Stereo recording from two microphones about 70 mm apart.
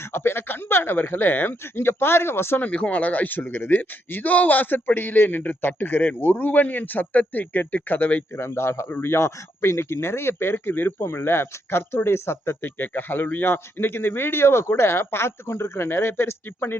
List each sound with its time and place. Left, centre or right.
0.0 s speech: left
8.4 s speech: left